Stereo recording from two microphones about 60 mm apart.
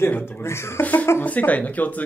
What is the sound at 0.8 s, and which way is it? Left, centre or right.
Speech, left.